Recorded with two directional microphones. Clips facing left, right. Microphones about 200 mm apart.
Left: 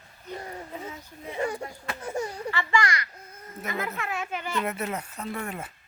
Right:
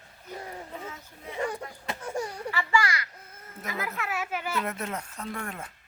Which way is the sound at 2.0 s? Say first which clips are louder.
Left 2 dB; 5° left (ahead or behind).